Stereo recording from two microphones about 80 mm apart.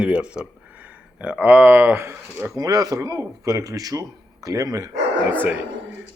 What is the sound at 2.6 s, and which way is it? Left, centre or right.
A man's voice, right.